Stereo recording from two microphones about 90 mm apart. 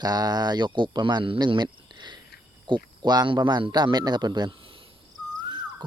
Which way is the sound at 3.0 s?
50° right (ahead or behind).